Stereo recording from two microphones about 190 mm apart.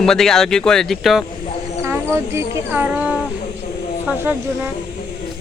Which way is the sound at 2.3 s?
10° right (ahead or behind).